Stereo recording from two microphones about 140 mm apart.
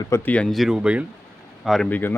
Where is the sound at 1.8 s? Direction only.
10° left (ahead or behind).